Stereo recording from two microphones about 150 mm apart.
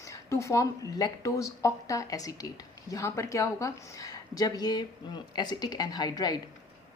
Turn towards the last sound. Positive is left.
turn(degrees=25)  # may be behind; listen again after turning